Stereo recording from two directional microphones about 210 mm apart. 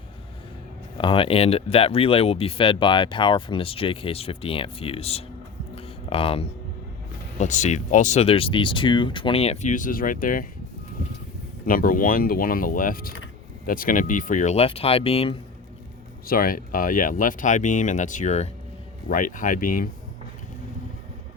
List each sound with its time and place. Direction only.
0.9 s speech: 25° left (ahead or behind)
5.7 s a sound: 25° left (ahead or behind)
7.3 s speech: 35° left (ahead or behind)
11.6 s speech: 40° left (ahead or behind)
16.2 s speech: 45° left (ahead or behind)